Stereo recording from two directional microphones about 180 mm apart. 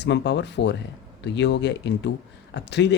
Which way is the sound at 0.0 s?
75° left (ahead or behind).